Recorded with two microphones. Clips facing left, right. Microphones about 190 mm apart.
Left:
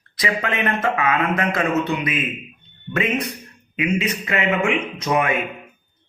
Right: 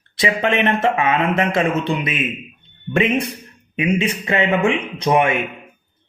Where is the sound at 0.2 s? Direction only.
25° right (ahead or behind).